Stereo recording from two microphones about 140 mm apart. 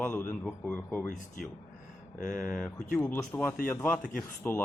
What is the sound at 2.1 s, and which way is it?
Speech, 75° left (ahead or behind).